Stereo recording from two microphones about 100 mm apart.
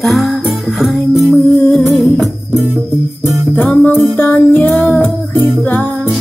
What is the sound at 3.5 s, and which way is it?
Music, 20° left (ahead or behind).